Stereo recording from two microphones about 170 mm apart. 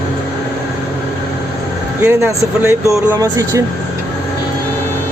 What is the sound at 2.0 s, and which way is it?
Speech, 15° right (ahead or behind).